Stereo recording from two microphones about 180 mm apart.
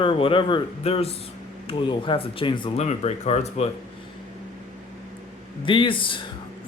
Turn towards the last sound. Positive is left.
turn(degrees=30)  # may be behind; listen again after turning